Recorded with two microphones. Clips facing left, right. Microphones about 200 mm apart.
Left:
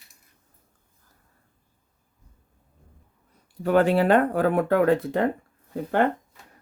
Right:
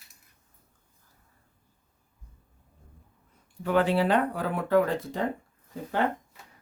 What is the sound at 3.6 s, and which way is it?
Speech, 45° left (ahead or behind).